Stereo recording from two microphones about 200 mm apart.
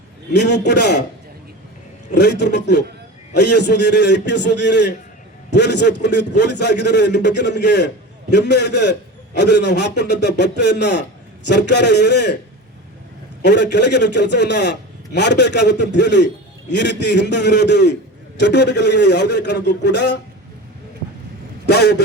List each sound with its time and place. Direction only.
0.3 s a man's voice: 60° left (ahead or behind)
2.1 s a man's voice: 60° left (ahead or behind)
13.4 s a man's voice: 60° left (ahead or behind)
21.7 s a man's voice: 55° left (ahead or behind)